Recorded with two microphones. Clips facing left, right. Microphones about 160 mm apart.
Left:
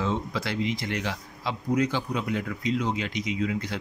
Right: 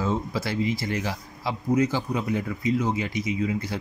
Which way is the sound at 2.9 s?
70° left (ahead or behind).